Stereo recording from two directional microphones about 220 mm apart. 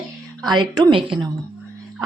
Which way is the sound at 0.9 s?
20° right (ahead or behind).